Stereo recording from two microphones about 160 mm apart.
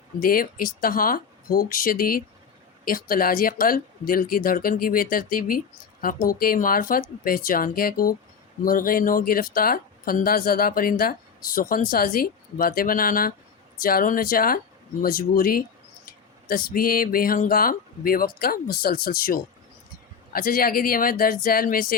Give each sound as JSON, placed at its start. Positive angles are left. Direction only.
{"t": 0.2, "sound": "speech", "side_deg": 65}